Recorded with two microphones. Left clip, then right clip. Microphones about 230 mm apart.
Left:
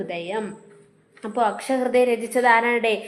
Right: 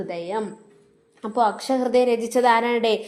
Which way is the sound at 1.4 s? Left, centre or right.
Right.